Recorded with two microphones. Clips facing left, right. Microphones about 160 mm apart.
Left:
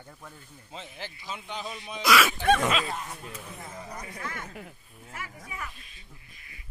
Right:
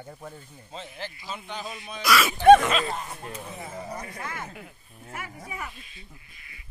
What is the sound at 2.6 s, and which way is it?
Speech, 5° left (ahead or behind).